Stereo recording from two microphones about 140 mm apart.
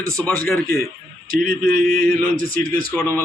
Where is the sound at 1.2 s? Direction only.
90° right.